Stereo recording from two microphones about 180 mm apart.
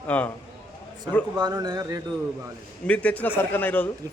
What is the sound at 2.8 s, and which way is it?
A man's voice, 5° left (ahead or behind).